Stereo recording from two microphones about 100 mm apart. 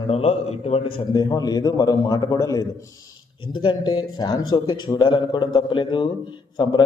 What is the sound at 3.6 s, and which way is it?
Speech, 50° left (ahead or behind).